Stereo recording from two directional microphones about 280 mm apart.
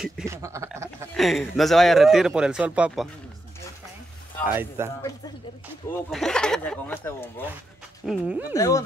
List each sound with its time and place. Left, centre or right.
0.0 s a sound: centre
1.1 s speech: centre
4.5 s speech: centre
6.1 s speech: centre
8.1 s speech: centre
8.5 s speech: centre